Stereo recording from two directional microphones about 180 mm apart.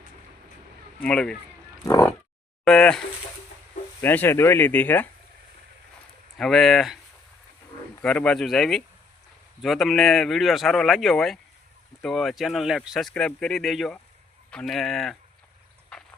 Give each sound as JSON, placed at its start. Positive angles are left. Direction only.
{"t": 1.0, "sound": "speech", "side_deg": 5}
{"t": 1.8, "sound": "roaring cats", "side_deg": 15}
{"t": 2.6, "sound": "speech", "side_deg": 5}
{"t": 4.0, "sound": "speech", "side_deg": 10}
{"t": 6.4, "sound": "speech", "side_deg": 0}
{"t": 8.0, "sound": "speech", "side_deg": 5}
{"t": 15.9, "sound": "a sound", "side_deg": 5}